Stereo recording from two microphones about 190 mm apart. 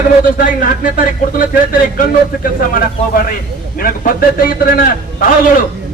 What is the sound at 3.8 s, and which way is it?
A man's voice, 50° left (ahead or behind).